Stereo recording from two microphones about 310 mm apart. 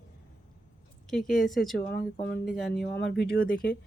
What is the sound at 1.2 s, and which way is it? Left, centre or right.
Speech, left.